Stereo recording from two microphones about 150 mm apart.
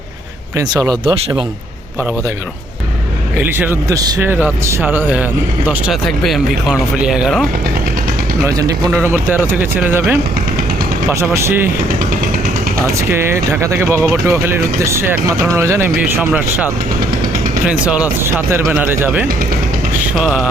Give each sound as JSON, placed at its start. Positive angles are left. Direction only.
{"t": 0.8, "sound": "a man's voice", "side_deg": -25}
{"t": 3.4, "sound": "a man's voice", "side_deg": -15}
{"t": 4.3, "sound": "speech", "side_deg": -15}
{"t": 8.4, "sound": "a man's voice", "side_deg": -25}
{"t": 8.9, "sound": "speech", "side_deg": -15}
{"t": 11.3, "sound": "speech", "side_deg": -15}
{"t": 13.0, "sound": "speech", "side_deg": -15}
{"t": 17.7, "sound": "speech", "side_deg": -5}
{"t": 20.1, "sound": "a sound", "side_deg": -5}